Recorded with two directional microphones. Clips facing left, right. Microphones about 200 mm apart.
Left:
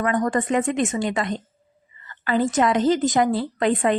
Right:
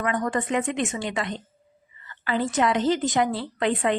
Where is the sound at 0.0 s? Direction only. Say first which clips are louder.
Left 4 dB; 45° left (ahead or behind).